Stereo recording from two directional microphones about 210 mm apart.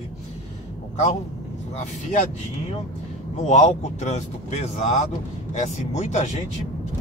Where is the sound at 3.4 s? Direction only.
35° left (ahead or behind).